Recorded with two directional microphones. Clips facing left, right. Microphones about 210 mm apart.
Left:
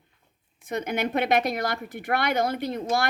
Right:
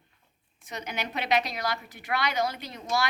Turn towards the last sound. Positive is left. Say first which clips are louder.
# left 4 dB
turn(degrees=55)  # may be behind; listen again after turning